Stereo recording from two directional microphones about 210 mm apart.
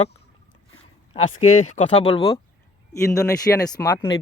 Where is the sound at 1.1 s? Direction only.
35° left (ahead or behind).